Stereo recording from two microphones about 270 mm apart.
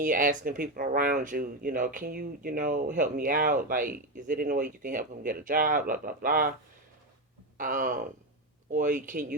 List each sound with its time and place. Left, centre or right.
0.0 s speech: right
7.6 s speech: right